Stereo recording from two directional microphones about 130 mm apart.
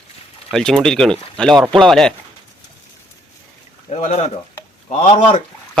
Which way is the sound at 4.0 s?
60° left (ahead or behind).